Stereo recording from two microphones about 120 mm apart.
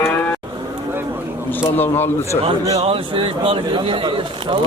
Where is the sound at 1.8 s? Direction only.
15° left (ahead or behind).